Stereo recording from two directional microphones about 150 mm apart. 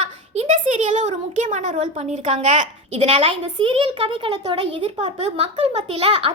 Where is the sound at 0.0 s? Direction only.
50° right (ahead or behind).